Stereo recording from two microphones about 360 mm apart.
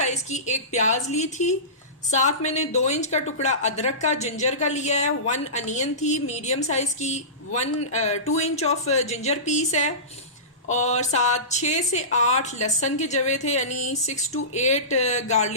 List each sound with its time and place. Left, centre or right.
0.0 s a woman's voice: centre